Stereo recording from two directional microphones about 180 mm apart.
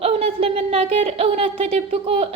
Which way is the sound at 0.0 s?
35° right (ahead or behind).